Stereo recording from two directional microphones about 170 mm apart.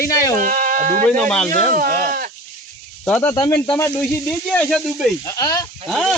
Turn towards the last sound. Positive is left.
turn(degrees=0)  # may be behind; listen again after turning